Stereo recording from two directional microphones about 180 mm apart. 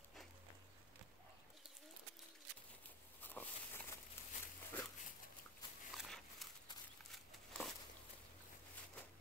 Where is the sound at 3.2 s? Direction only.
10° left (ahead or behind).